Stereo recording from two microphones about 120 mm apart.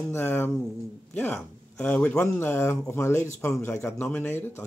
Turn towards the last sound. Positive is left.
turn(degrees=15)  # may be behind; listen again after turning